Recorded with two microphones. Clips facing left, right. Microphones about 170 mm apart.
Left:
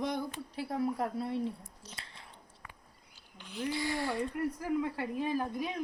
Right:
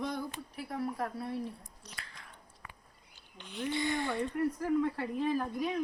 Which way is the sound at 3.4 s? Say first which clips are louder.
Right 1 dB; 5° left (ahead or behind).